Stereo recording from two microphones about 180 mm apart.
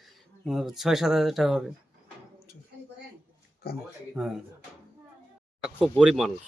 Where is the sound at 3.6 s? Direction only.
65° left (ahead or behind).